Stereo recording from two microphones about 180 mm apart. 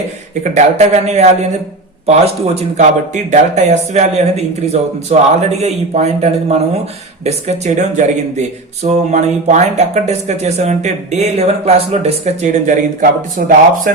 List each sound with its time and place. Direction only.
0.4 s speech: 40° right (ahead or behind)